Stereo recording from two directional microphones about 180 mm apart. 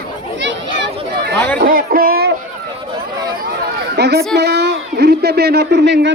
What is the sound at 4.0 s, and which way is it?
Speech, 65° right (ahead or behind).